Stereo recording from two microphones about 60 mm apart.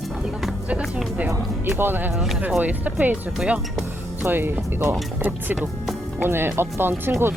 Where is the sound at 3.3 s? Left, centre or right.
Centre.